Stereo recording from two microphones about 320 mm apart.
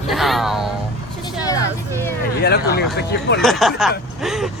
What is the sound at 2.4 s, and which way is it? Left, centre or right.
Speech, left.